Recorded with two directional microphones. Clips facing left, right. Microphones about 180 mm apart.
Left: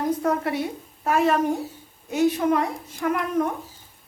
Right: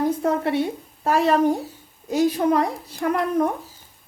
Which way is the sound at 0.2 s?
25° right (ahead or behind).